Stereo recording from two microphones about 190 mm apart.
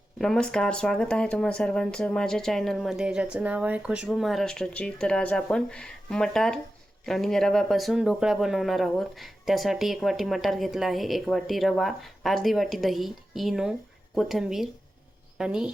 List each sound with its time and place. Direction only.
0.2 s speech: 5° left (ahead or behind)